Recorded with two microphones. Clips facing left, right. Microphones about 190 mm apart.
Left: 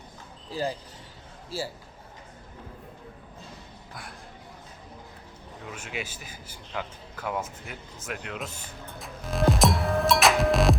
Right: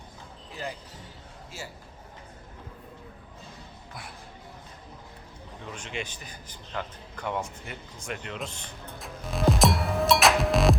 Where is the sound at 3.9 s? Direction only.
Centre (ahead or behind).